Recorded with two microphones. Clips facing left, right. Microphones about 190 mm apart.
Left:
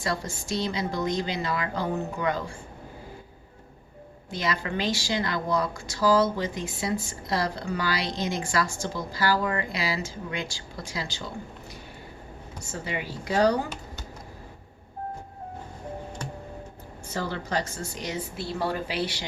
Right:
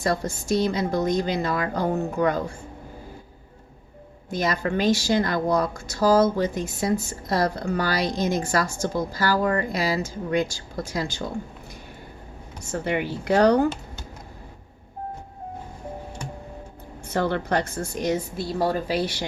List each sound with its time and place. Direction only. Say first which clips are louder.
0.0 s speech: right 5 dB; 45° right (ahead or behind)
4.3 s speech: right 5 dB; 45° right (ahead or behind)
12.7 s speech: right 8 dB; 60° right (ahead or behind)
17.1 s speech: right 7 dB; 60° right (ahead or behind); by 19.2 s 45° right (ahead or behind)